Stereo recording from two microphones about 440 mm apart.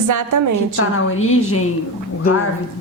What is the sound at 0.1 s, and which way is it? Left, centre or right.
Speech, right.